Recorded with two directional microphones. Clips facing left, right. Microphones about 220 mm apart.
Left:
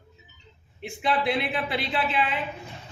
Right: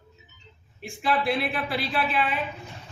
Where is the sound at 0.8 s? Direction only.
20° left (ahead or behind).